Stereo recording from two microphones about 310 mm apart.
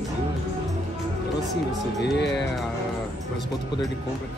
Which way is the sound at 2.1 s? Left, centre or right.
Left.